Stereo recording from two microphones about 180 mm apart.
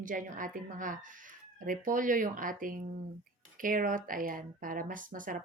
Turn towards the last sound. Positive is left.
turn(degrees=-50)  # may be behind; listen again after turning